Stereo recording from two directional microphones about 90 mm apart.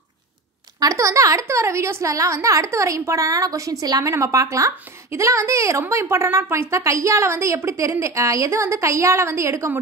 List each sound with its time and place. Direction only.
0.7 s a woman's voice: 40° right (ahead or behind)